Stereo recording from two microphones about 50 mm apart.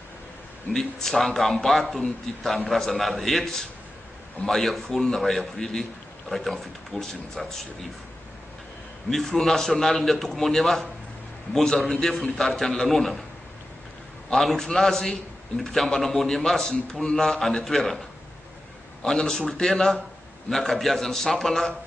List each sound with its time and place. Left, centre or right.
0.7 s a man's voice: centre
9.1 s a man's voice: centre
14.3 s a man's voice: centre
19.0 s a man's voice: centre